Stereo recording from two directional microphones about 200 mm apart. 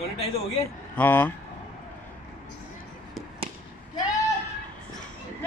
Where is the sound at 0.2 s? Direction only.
30° left (ahead or behind).